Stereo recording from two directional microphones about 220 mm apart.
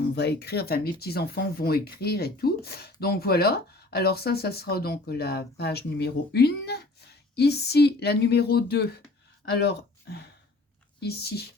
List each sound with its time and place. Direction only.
0.2 s speech: 50° left (ahead or behind)